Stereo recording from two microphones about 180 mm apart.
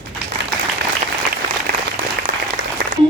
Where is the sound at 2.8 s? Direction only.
70° right (ahead or behind).